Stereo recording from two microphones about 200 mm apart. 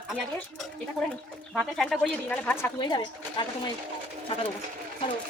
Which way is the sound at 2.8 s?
20° left (ahead or behind).